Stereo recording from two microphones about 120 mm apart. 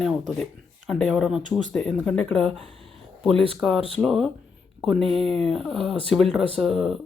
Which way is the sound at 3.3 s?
50° right (ahead or behind).